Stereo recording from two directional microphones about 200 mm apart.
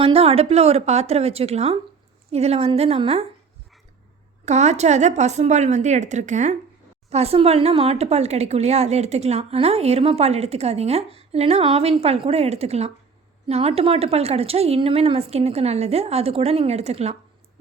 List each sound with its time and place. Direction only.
0.0 s speech: 30° right (ahead or behind)
4.4 s speech: 35° right (ahead or behind)